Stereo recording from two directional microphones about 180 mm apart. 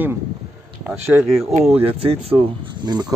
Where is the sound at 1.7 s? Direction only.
30° right (ahead or behind).